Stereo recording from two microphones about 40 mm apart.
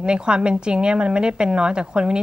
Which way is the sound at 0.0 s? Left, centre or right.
Right.